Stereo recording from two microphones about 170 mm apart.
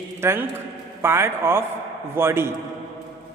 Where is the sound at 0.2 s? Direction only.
15° right (ahead or behind).